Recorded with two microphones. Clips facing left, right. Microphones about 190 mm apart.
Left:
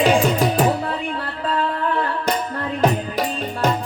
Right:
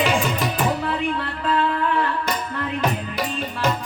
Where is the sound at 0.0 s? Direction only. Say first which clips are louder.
Left 5 dB; 35° left (ahead or behind).